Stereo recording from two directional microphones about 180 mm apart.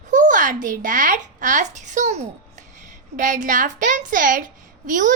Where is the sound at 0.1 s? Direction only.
45° right (ahead or behind).